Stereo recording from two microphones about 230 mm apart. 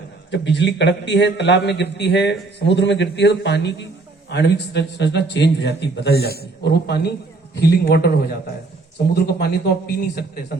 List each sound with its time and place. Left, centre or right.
0.3 s a man's voice: left